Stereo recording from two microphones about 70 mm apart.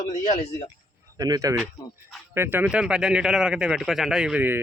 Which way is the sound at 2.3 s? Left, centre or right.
Right.